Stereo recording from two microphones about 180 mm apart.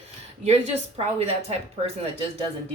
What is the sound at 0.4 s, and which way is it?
A woman's voice, 35° right (ahead or behind).